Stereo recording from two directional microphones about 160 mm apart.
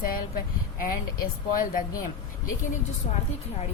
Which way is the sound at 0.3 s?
65° left (ahead or behind).